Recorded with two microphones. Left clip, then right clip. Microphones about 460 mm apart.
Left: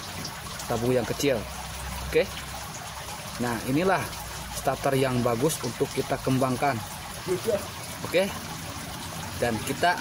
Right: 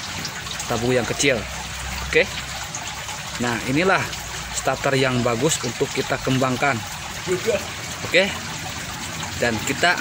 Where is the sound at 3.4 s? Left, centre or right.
Left.